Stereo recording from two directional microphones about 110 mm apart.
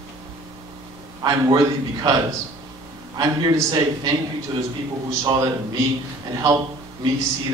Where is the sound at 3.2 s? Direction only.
35° right (ahead or behind).